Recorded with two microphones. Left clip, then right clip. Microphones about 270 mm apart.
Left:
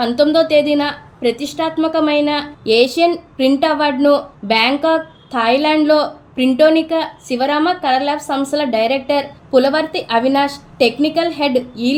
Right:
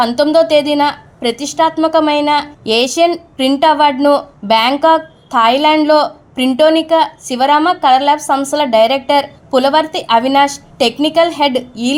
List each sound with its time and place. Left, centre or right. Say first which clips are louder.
0.0 s a woman's voice: right 3 dB; centre